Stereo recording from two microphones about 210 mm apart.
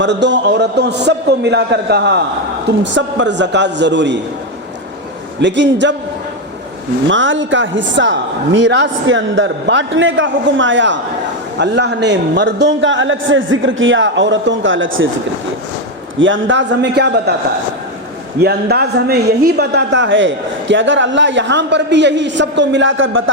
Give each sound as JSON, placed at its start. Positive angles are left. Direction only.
{"t": 0.0, "sound": "a man's voice", "side_deg": -55}
{"t": 5.4, "sound": "a man's voice", "side_deg": -60}
{"t": 7.1, "sound": "a man's voice", "side_deg": -60}
{"t": 16.1, "sound": "a man's voice", "side_deg": -65}
{"t": 18.3, "sound": "a man's voice", "side_deg": -50}